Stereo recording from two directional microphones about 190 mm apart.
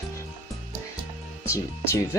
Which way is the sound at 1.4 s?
15° left (ahead or behind).